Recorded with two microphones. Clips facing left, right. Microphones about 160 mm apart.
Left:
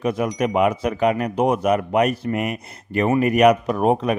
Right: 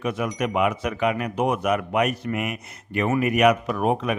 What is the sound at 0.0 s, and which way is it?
Speech, 35° left (ahead or behind).